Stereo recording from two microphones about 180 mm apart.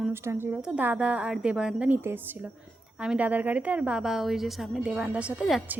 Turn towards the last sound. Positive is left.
turn(degrees=-5)  # may be behind; listen again after turning